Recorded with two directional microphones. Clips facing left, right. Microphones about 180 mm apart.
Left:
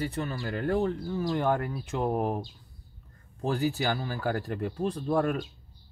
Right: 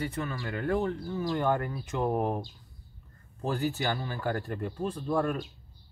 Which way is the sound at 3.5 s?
10° left (ahead or behind).